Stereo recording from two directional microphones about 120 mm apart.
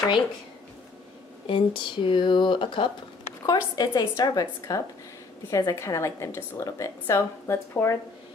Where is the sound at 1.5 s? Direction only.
45° left (ahead or behind).